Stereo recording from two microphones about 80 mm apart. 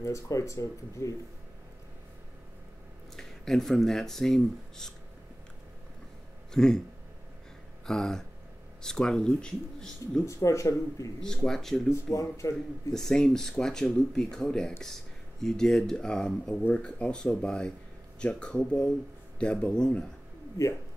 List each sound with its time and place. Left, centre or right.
0.0 s speech: left
3.2 s speech: centre
6.5 s speech: centre
7.8 s speech: centre
10.2 s speech: left
11.4 s speech: centre
11.9 s speech: left
12.9 s speech: centre